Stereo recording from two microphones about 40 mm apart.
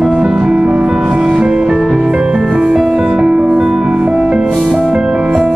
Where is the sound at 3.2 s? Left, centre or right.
Right.